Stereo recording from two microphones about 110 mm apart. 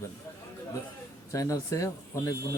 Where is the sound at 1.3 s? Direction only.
30° left (ahead or behind).